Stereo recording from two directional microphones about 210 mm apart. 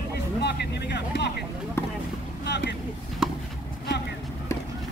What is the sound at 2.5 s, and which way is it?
Boat, 55° left (ahead or behind).